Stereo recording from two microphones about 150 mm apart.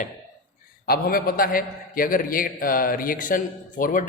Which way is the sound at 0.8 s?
90° left.